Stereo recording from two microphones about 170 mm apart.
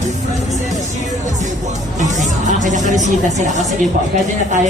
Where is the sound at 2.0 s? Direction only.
45° right (ahead or behind).